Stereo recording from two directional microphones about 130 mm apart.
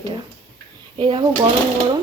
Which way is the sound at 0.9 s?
35° right (ahead or behind).